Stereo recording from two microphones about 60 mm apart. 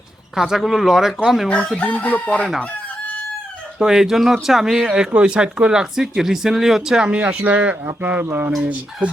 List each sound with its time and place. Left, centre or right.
0.3 s speech: centre
1.5 s chicken: centre
3.8 s speech: centre
7.2 s speech: right
8.2 s speech: right